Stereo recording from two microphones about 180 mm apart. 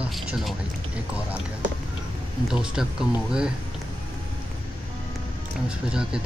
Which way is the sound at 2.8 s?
5° right (ahead or behind).